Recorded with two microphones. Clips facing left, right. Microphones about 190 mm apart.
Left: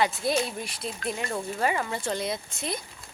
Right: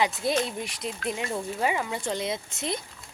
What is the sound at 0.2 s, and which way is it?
Speech, 20° right (ahead or behind).